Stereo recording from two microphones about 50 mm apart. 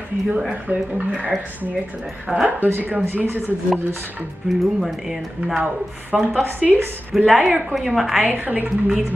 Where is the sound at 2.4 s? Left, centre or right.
Right.